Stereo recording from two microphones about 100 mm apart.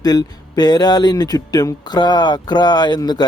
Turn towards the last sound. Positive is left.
turn(degrees=45)  # may be behind; listen again after turning